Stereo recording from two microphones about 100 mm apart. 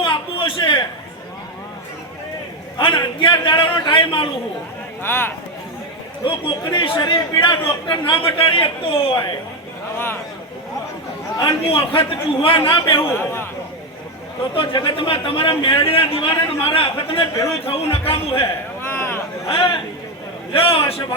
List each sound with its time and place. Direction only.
0.0 s a sound: 60° left (ahead or behind)
2.7 s a man's voice: 55° left (ahead or behind)
5.0 s a man's voice: 20° left (ahead or behind)
6.2 s a man's voice: 55° left (ahead or behind)
11.7 s a man's voice: 65° left (ahead or behind)
13.1 s a man's voice: 25° left (ahead or behind)
14.5 s a man's voice: 60° left (ahead or behind); by 18.4 s 75° left (ahead or behind)
18.9 s a sound: 25° left (ahead or behind)
19.5 s a man's voice: 65° left (ahead or behind)